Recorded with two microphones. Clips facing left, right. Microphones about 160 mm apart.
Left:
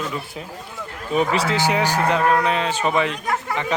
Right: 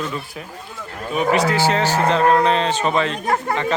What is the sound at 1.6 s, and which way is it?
Speech, 15° left (ahead or behind).